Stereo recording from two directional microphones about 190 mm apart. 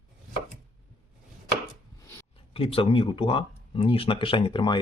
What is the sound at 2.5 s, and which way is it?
Speech, 30° left (ahead or behind).